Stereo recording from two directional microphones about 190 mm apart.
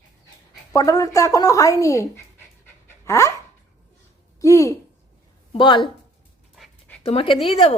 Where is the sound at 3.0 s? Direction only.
15° left (ahead or behind).